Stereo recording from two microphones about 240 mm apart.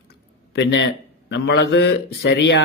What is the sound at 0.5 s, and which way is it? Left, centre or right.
Speech, left.